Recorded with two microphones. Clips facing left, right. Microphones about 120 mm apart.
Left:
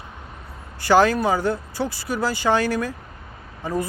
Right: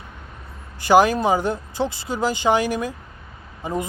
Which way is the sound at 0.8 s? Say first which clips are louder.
Right 1 dB; 15° right (ahead or behind).